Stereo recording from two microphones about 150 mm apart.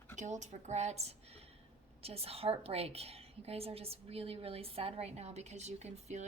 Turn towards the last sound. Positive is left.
turn(degrees=-45)  # may be behind; listen again after turning